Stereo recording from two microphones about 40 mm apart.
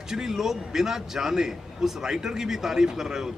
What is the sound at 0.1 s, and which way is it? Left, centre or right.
A man's voice, centre.